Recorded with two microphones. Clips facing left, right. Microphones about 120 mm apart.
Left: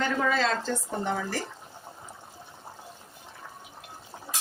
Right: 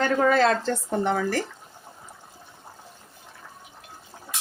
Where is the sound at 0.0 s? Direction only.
50° right (ahead or behind).